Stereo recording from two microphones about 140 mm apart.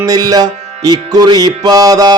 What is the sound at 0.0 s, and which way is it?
Music, 25° right (ahead or behind).